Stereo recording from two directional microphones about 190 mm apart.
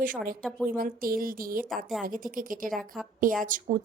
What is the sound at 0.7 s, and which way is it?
Speech, 50° right (ahead or behind).